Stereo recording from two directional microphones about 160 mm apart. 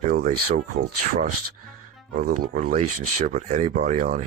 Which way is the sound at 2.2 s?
65° right (ahead or behind).